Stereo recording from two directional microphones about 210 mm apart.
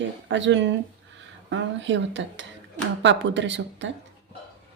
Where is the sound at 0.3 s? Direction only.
60° right (ahead or behind).